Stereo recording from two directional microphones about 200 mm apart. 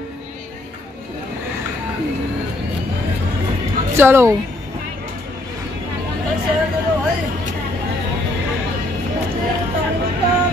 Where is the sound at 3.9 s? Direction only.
10° right (ahead or behind).